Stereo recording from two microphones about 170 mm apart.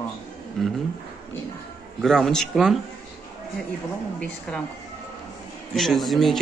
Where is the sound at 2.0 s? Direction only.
5° left (ahead or behind).